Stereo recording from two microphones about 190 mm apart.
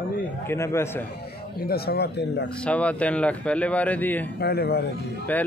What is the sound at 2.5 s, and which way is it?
Speech, 5° left (ahead or behind).